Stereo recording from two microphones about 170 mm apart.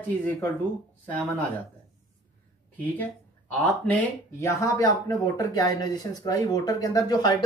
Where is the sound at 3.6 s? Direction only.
15° left (ahead or behind).